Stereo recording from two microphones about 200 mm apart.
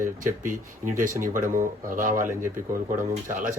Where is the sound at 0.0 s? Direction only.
40° right (ahead or behind).